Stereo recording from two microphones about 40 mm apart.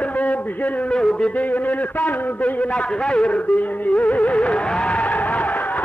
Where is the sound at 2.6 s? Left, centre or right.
Left.